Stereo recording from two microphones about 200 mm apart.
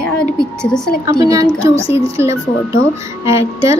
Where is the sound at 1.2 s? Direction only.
15° right (ahead or behind).